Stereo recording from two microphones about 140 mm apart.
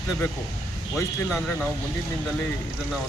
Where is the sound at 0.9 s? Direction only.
Centre (ahead or behind).